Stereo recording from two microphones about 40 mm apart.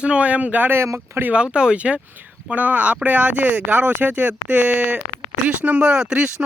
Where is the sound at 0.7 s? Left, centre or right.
Right.